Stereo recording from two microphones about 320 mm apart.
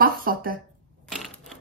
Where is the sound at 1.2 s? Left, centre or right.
Centre.